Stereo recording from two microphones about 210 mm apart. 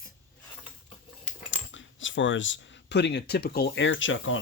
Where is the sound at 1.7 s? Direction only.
65° left (ahead or behind).